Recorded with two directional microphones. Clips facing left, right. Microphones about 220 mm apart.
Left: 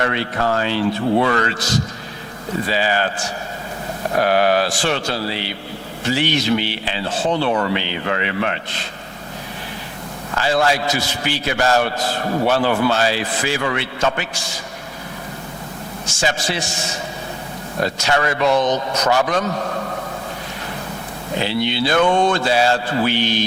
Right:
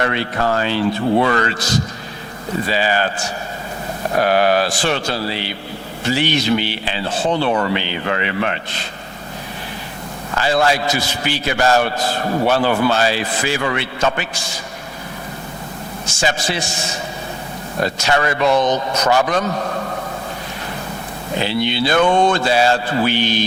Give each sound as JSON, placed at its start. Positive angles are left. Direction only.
{"t": 0.0, "sound": "speech", "side_deg": -20}
{"t": 10.3, "sound": "speech", "side_deg": -15}
{"t": 16.0, "sound": "speech", "side_deg": -10}
{"t": 19.5, "sound": "a man's voice", "side_deg": -25}
{"t": 21.3, "sound": "speech", "side_deg": -15}